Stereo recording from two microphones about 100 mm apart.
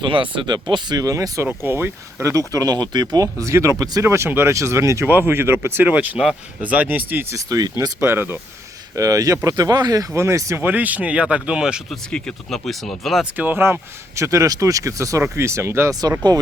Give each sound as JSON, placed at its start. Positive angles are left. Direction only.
{"t": 0.0, "sound": "speech", "side_deg": -55}
{"t": 1.5, "sound": "speech", "side_deg": -20}
{"t": 3.4, "sound": "speech", "side_deg": -30}
{"t": 7.3, "sound": "speech", "side_deg": -35}
{"t": 8.0, "sound": "speech", "side_deg": -20}
{"t": 9.0, "sound": "speech", "side_deg": -35}
{"t": 10.6, "sound": "speech", "side_deg": -15}
{"t": 11.9, "sound": "speech", "side_deg": 5}
{"t": 13.3, "sound": "speech", "side_deg": -20}